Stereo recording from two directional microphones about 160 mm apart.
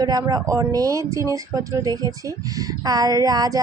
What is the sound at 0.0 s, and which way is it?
Speech, 25° right (ahead or behind).